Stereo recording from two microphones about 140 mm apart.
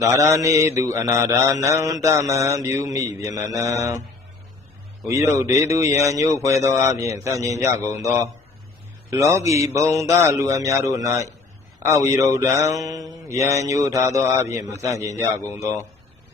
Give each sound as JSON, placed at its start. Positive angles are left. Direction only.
{"t": 0.0, "sound": "mantra", "side_deg": -25}
{"t": 5.0, "sound": "mantra", "side_deg": -25}